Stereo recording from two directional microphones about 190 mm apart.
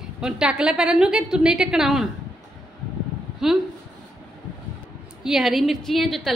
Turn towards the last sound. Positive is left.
turn(degrees=0)  # may be behind; listen again after turning